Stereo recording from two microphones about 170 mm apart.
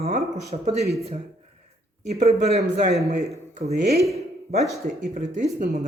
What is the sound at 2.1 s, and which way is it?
Speech, 40° right (ahead or behind).